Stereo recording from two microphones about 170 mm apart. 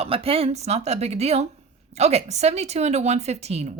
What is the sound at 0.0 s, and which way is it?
Speech, 35° right (ahead or behind).